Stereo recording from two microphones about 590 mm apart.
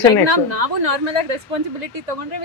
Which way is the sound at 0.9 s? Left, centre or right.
Right.